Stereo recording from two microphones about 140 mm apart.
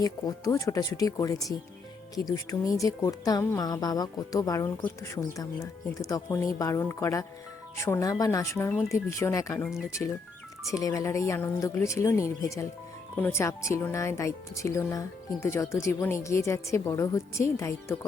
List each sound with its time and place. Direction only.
0.0 s speech: 25° left (ahead or behind)
10.7 s speech: 25° left (ahead or behind)